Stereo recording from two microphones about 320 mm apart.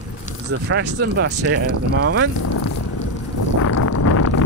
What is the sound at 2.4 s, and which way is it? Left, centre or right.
Vehicle, left.